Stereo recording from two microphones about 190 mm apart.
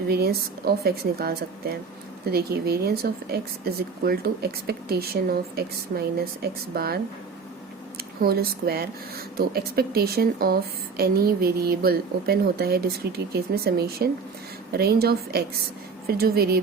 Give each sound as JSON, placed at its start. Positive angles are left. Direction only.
{"t": 0.1, "sound": "speech", "side_deg": -55}